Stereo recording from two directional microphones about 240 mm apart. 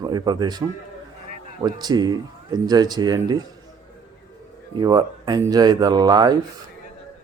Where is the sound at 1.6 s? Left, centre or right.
Centre.